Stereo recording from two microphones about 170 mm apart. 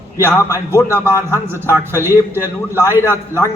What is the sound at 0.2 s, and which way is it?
Speech, 15° left (ahead or behind).